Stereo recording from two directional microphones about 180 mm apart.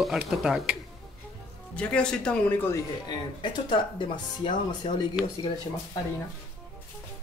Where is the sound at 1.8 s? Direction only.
5° left (ahead or behind).